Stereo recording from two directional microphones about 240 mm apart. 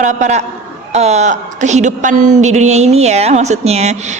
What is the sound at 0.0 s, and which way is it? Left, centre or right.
A woman's voice, right.